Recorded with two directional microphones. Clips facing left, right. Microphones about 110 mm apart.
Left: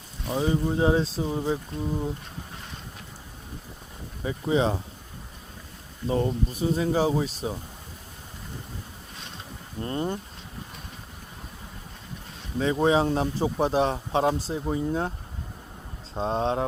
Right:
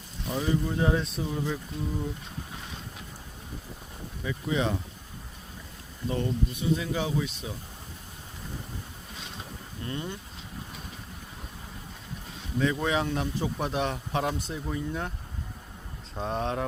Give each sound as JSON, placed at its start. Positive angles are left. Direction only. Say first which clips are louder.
{"t": 0.3, "sound": "speech", "louder": "left 3 dB", "side_deg": 30}
{"t": 4.2, "sound": "speech", "louder": "left 5 dB", "side_deg": 30}
{"t": 6.1, "sound": "speech", "louder": "left 4 dB", "side_deg": 35}
{"t": 9.8, "sound": "speech", "louder": "left 6 dB", "side_deg": 40}
{"t": 12.5, "sound": "speech", "louder": "left 5 dB", "side_deg": 30}
{"t": 16.1, "sound": "speech", "louder": "left 4 dB", "side_deg": 30}